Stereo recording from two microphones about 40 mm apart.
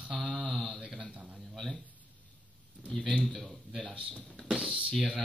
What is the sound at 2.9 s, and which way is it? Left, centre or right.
Speech, left.